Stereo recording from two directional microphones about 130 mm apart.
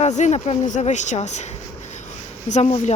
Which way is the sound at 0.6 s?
70° left (ahead or behind).